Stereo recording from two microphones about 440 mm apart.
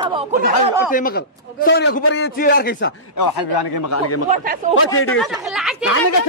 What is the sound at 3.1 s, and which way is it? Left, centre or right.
Speech, left.